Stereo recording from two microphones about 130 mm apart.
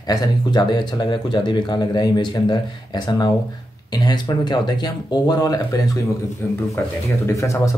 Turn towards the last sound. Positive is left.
turn(degrees=25)  # may be behind; listen again after turning